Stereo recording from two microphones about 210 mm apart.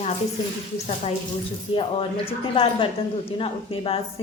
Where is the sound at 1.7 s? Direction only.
25° left (ahead or behind).